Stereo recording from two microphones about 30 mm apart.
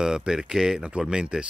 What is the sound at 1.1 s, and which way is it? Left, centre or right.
Speech, right.